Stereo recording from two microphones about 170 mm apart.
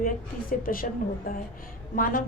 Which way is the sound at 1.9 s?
55° left (ahead or behind).